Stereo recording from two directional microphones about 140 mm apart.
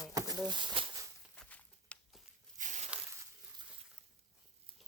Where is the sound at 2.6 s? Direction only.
60° right (ahead or behind).